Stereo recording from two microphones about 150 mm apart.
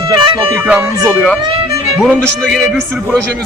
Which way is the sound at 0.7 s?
5° right (ahead or behind).